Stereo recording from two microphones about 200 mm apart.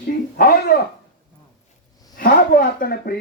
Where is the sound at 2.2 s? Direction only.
45° left (ahead or behind).